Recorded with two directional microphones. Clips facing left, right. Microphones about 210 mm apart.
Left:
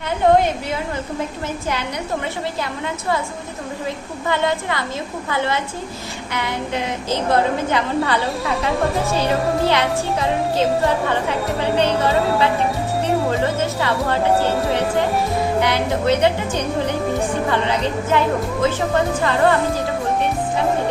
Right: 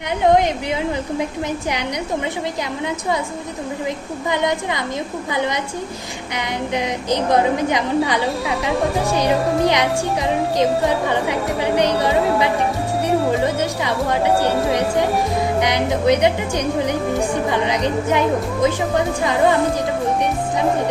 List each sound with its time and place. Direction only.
0.3 s a woman's voice: 15° right (ahead or behind)
4.3 s speech: 15° right (ahead or behind)
13.4 s music: 15° right (ahead or behind)
15.6 s a woman's voice: 15° right (ahead or behind)